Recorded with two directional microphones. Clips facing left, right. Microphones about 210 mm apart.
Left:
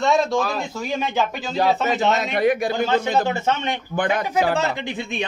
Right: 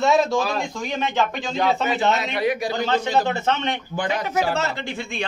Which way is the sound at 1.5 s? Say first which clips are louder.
Left 2 dB; 40° left (ahead or behind).